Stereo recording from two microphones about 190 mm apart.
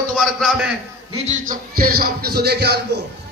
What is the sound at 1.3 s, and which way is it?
A man's voice, 45° right (ahead or behind).